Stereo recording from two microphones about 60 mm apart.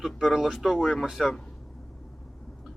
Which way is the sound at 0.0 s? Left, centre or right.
Centre.